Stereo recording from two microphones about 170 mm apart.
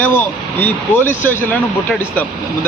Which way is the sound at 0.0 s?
10° left (ahead or behind).